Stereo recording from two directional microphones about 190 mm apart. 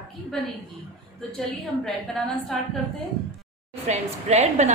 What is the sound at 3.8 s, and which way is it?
Speech, 35° right (ahead or behind).